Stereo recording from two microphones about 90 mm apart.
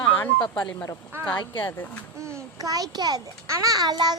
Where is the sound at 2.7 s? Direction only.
45° right (ahead or behind).